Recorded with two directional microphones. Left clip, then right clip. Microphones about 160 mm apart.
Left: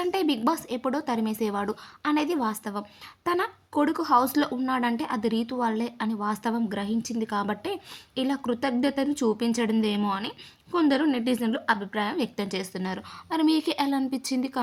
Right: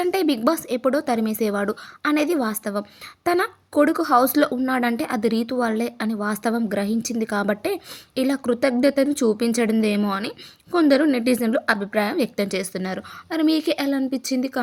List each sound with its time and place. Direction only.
0.0 s speech: 25° right (ahead or behind)